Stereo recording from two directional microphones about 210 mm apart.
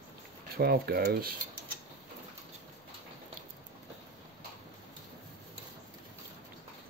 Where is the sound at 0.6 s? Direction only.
50° right (ahead or behind).